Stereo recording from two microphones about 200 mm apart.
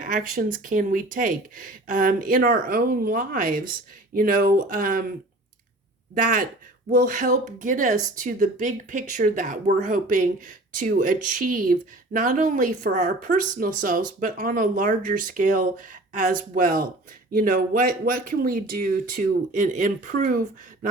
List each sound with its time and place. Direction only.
0.0 s speech: 40° right (ahead or behind)
6.1 s speech: 40° right (ahead or behind)